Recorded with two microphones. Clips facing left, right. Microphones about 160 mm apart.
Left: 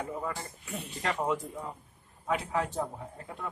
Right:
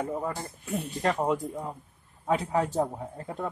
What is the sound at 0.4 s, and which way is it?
A man's voice, 45° right (ahead or behind).